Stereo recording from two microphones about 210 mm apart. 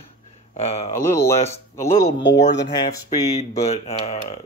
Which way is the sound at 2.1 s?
55° left (ahead or behind).